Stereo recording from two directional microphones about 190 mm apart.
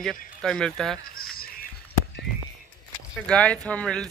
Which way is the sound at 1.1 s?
50° left (ahead or behind).